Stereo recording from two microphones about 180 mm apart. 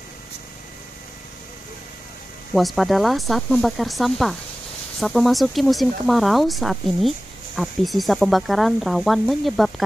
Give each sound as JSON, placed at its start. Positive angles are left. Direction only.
{"t": 2.5, "sound": "speech", "side_deg": 0}